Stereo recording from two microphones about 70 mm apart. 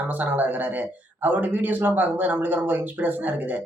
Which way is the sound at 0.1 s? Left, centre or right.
Right.